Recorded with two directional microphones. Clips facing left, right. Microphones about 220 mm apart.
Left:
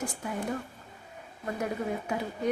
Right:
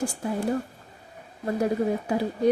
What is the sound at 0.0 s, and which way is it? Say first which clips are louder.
Speech: right 6 dB; 30° right (ahead or behind).